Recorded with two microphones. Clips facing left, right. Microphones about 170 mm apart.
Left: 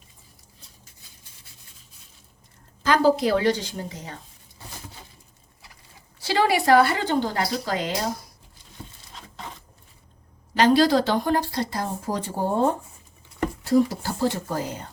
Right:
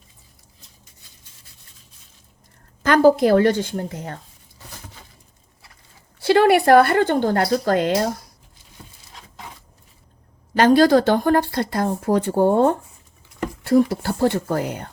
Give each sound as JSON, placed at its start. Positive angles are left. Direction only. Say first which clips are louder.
{"t": 2.8, "sound": "speech", "louder": "right 5 dB", "side_deg": -55}
{"t": 6.1, "sound": "speech", "louder": "right 7 dB", "side_deg": -55}
{"t": 10.5, "sound": "speech", "louder": "right 4 dB", "side_deg": -50}